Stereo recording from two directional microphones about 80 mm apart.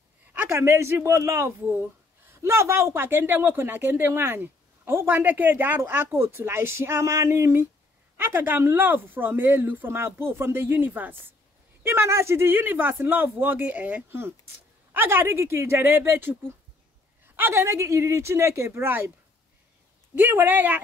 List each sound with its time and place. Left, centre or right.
0.5 s speech: right
20.2 s speech: right